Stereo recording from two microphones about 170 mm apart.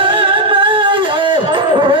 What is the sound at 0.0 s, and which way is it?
Music, 30° right (ahead or behind).